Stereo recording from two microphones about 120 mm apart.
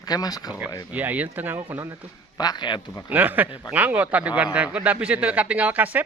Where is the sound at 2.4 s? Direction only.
35° left (ahead or behind).